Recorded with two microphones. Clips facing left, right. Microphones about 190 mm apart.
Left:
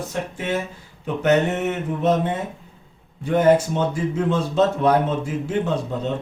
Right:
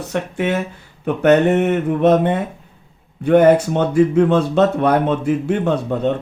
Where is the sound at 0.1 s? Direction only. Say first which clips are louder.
Right 8 dB; 70° right (ahead or behind).